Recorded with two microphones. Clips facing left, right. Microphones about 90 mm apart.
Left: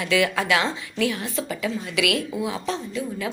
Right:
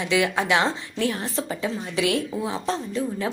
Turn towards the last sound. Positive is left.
turn(degrees=-35)  # may be behind; listen again after turning